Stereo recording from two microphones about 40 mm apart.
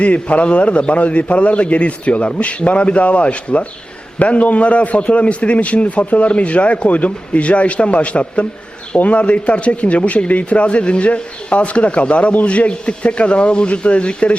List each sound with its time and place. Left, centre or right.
0.0 s a man's voice: left